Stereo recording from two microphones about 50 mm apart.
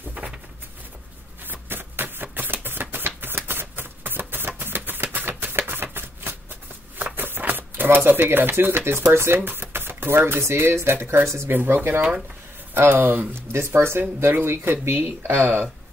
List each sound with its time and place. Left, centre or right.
0.2 s a sound: right
1.4 s shuffling cards: right
2.3 s a sound: right
7.2 s typewriter: right
9.0 s speech: right
11.5 s speech: right
13.3 s speech: right